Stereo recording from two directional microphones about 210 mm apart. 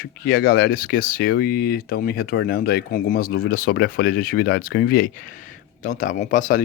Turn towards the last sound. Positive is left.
turn(degrees=40)  # may be behind; listen again after turning